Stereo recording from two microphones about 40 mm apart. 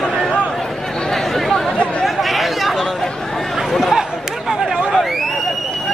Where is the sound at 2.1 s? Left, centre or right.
Centre.